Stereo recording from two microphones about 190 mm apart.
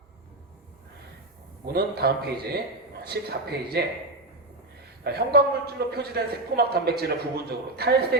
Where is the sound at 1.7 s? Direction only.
55° right (ahead or behind).